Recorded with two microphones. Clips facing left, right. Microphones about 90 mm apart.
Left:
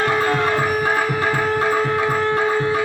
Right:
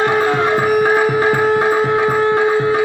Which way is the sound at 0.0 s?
15° right (ahead or behind).